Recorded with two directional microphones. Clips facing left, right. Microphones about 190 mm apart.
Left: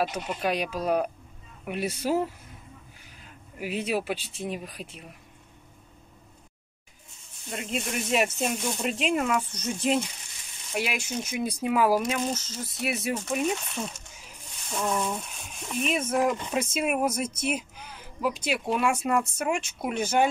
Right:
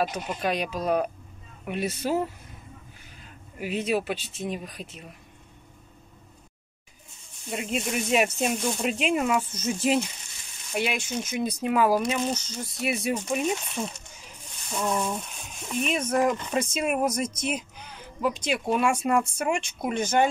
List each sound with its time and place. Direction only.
0.0 s speech: 5° left (ahead or behind)
3.5 s speech: 10° left (ahead or behind)
7.4 s speech: 5° right (ahead or behind)